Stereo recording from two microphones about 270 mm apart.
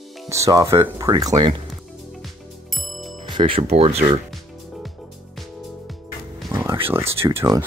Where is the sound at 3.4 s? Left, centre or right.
Centre.